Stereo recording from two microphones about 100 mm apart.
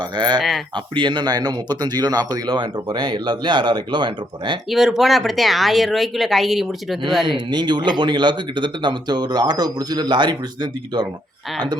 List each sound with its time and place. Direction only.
0.0 s speech: 50° right (ahead or behind)
4.7 s speech: centre (ahead or behind)
7.3 s speech: 50° right (ahead or behind)